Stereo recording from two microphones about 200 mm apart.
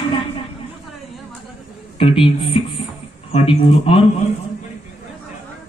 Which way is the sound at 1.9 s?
25° left (ahead or behind).